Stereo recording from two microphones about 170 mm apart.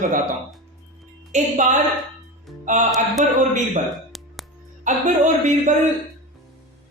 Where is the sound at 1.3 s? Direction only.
45° right (ahead or behind).